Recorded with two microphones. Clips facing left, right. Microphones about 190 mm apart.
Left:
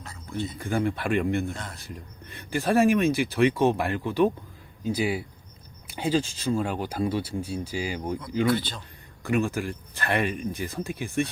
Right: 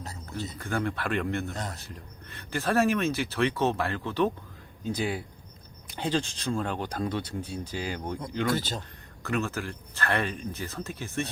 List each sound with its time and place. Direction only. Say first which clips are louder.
0.0 s a sound: left 4 dB; 40° right (ahead or behind)
0.6 s speech: left 3 dB; 15° left (ahead or behind)
8.4 s a man's voice: left 2 dB; 45° right (ahead or behind)
9.2 s speech: left 5 dB; 15° left (ahead or behind)